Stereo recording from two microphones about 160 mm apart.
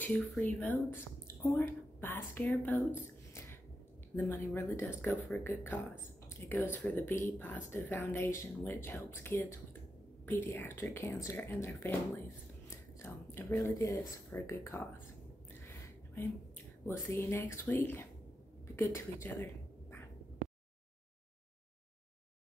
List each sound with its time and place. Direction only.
0.0 s speech: 10° left (ahead or behind)
16.8 s speech: 15° left (ahead or behind)